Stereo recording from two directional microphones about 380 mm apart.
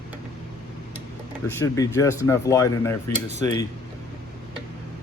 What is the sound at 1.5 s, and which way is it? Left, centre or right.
Speech, centre.